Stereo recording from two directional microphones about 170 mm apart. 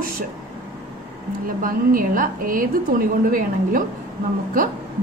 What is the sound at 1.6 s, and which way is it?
A woman's voice, 55° right (ahead or behind).